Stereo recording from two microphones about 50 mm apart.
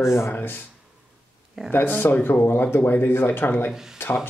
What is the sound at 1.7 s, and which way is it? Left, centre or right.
Speech, left.